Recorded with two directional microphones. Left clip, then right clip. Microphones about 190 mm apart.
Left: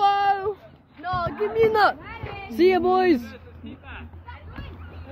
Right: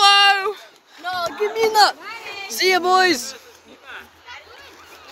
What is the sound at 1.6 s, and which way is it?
Speech, 40° left (ahead or behind).